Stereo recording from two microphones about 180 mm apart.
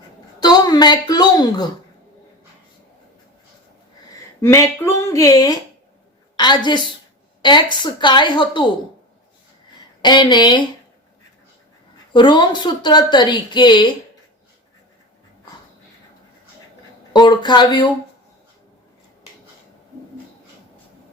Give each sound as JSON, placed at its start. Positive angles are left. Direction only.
{"t": 0.3, "sound": "speech", "side_deg": 20}
{"t": 4.4, "sound": "a woman's voice", "side_deg": 15}
{"t": 10.0, "sound": "speech", "side_deg": 25}
{"t": 12.1, "sound": "speech", "side_deg": 25}
{"t": 17.1, "sound": "speech", "side_deg": 25}